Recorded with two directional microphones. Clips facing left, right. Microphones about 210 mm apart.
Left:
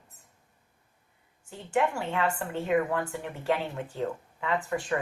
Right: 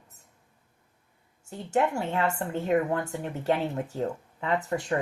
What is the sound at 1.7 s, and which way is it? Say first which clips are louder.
A woman's voice: right 2 dB; 40° right (ahead or behind).